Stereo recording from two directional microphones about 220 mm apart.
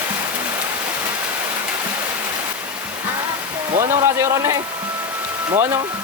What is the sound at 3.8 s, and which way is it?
Speech, 15° right (ahead or behind).